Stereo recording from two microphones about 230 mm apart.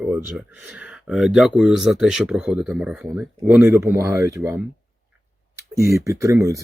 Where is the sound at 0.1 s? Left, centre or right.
Centre.